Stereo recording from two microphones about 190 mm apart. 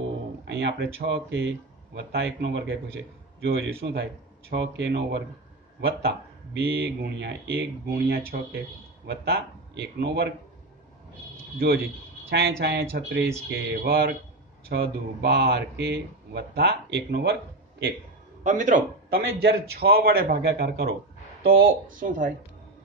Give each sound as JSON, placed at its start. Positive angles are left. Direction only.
{"t": 0.5, "sound": "a sound", "side_deg": -65}
{"t": 1.0, "sound": "speech", "side_deg": -65}
{"t": 12.3, "sound": "speech", "side_deg": -55}
{"t": 18.4, "sound": "a man's voice", "side_deg": -40}
{"t": 19.4, "sound": "speech", "side_deg": -55}
{"t": 21.9, "sound": "speech", "side_deg": -45}